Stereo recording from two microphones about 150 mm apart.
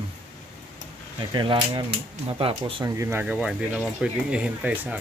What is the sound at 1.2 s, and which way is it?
Speech, 30° right (ahead or behind).